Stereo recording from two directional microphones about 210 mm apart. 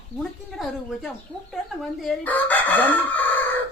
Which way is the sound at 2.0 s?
10° left (ahead or behind).